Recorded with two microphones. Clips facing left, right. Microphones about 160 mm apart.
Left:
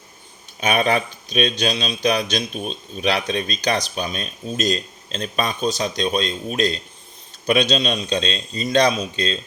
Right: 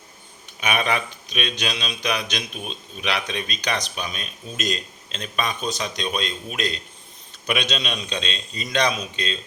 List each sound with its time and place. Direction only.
0.6 s speech: 35° left (ahead or behind)